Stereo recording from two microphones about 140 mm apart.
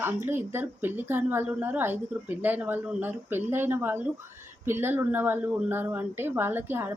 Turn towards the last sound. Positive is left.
turn(degrees=-15)  # may be behind; listen again after turning